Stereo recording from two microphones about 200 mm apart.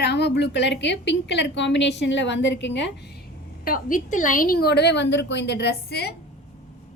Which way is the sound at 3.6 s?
45° left (ahead or behind).